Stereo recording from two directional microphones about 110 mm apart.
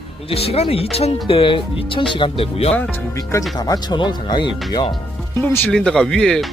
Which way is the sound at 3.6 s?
40° left (ahead or behind).